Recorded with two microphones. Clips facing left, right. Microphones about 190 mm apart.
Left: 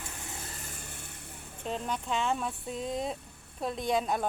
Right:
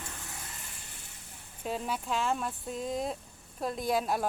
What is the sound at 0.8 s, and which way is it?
Vehicle, 55° left (ahead or behind).